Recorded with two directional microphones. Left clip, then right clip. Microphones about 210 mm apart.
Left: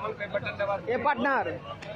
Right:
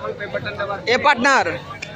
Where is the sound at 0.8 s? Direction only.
10° right (ahead or behind).